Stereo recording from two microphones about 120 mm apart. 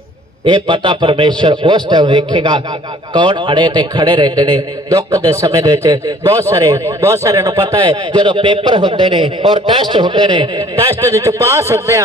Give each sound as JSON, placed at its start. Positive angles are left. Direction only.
{"t": 0.5, "sound": "a man's voice", "side_deg": -40}
{"t": 7.6, "sound": "a man's voice", "side_deg": -40}
{"t": 11.1, "sound": "a man's voice", "side_deg": -25}